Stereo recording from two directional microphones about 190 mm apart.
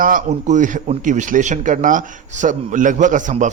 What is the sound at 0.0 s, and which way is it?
Speech, 45° right (ahead or behind).